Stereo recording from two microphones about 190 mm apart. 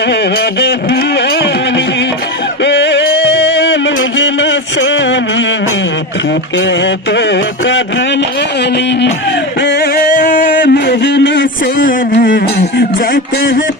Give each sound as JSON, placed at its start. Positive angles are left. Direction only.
{"t": 0.1, "sound": "music", "side_deg": 60}
{"t": 2.6, "sound": "music", "side_deg": 65}
{"t": 6.8, "sound": "mantra", "side_deg": 70}
{"t": 9.6, "sound": "music", "side_deg": 60}
{"t": 11.8, "sound": "a sound", "side_deg": 45}